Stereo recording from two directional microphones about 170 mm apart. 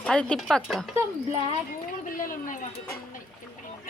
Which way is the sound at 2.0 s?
55° left (ahead or behind).